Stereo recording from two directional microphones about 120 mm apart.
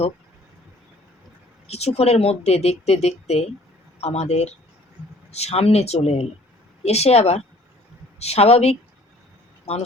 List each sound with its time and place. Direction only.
1.6 s speech: 60° left (ahead or behind)